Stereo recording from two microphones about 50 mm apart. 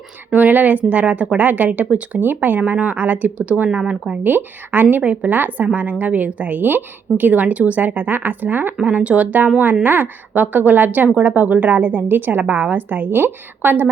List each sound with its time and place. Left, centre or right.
0.3 s speech: right
4.2 s a woman's voice: right